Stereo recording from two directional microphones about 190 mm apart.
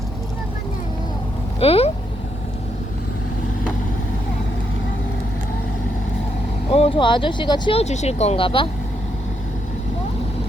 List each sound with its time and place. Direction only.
1.5 s speech: 30° left (ahead or behind)
6.7 s speech: 30° left (ahead or behind)